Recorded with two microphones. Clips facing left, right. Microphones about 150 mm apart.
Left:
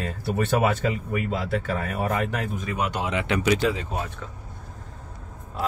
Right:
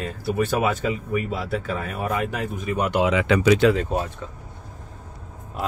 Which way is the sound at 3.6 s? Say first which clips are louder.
Right 6 dB; 75° right (ahead or behind).